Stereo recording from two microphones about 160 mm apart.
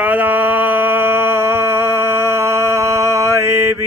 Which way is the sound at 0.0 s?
10° right (ahead or behind).